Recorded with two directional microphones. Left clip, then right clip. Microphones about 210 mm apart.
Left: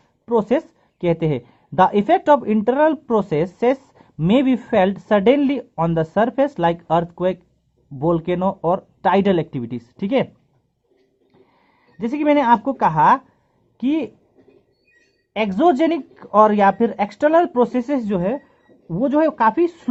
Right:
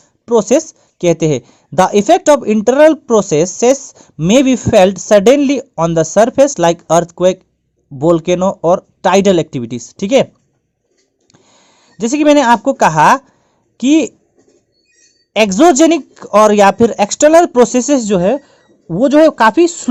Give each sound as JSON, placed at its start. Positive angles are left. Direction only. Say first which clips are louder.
{"t": 0.3, "sound": "speech", "louder": "right 8 dB", "side_deg": -30}
{"t": 11.3, "sound": "speech", "louder": "right 8 dB", "side_deg": -40}
{"t": 15.3, "sound": "speech", "louder": "right 8 dB", "side_deg": -40}